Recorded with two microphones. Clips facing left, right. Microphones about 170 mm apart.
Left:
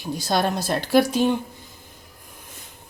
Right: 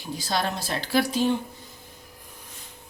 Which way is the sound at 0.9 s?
55° left (ahead or behind).